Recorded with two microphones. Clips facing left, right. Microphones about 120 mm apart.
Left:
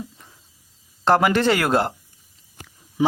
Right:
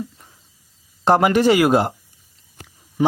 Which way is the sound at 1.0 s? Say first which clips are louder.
Right 3 dB; 15° right (ahead or behind).